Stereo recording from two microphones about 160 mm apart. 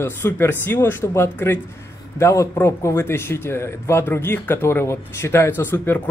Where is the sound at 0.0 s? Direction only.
15° left (ahead or behind).